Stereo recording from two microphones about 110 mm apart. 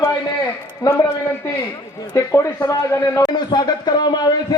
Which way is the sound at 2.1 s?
30° left (ahead or behind).